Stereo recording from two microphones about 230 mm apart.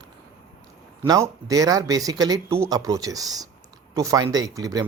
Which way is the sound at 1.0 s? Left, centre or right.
Centre.